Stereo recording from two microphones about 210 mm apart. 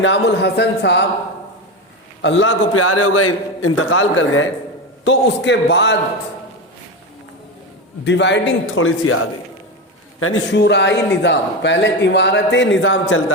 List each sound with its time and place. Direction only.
0.0 s a man's voice: 60° left (ahead or behind)
2.2 s a man's voice: 60° left (ahead or behind)
5.0 s a man's voice: 60° left (ahead or behind)
8.0 s a man's voice: 55° left (ahead or behind); by 9.1 s 70° left (ahead or behind)
10.2 s a man's voice: 80° left